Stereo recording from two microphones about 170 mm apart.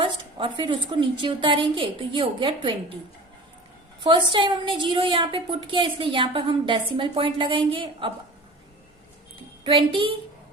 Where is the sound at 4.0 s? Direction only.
30° right (ahead or behind).